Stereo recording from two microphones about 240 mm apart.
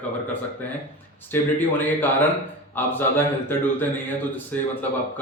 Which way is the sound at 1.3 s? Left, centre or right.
Centre.